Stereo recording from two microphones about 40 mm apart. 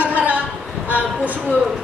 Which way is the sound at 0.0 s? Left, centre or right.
Right.